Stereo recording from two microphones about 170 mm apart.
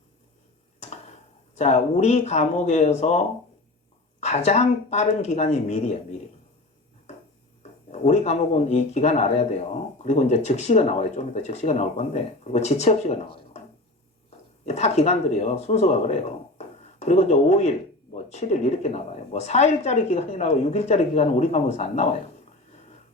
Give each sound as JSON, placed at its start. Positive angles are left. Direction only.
{"t": 1.5, "sound": "speech", "side_deg": 40}
{"t": 7.9, "sound": "speech", "side_deg": 40}